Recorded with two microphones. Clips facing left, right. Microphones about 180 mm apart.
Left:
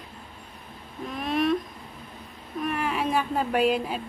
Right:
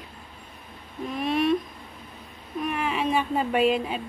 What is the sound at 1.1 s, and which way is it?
Speech, centre (ahead or behind).